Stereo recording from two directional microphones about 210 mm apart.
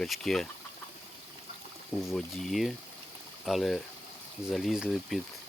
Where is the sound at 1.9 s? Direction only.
5° left (ahead or behind).